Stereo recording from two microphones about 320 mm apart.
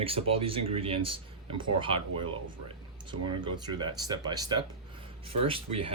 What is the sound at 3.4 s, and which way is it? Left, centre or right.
Speech, centre.